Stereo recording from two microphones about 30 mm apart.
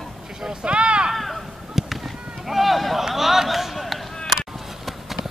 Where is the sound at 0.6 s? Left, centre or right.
Right.